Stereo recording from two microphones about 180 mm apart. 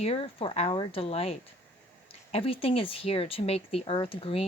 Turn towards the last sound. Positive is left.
turn(degrees=30)  # may be behind; listen again after turning